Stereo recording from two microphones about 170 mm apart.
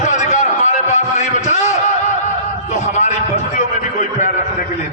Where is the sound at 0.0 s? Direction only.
45° left (ahead or behind).